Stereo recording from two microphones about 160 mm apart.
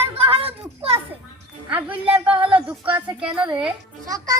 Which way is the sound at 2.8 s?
30° right (ahead or behind).